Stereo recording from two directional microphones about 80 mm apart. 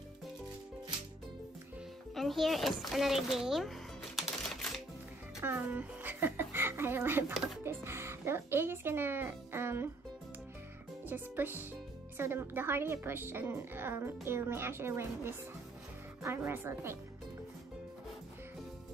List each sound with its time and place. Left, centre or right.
2.1 s a child's voice: centre
4.2 s music: centre
5.4 s a sound: right
7.6 s a woman's voice: right
11.1 s a woman's voice: right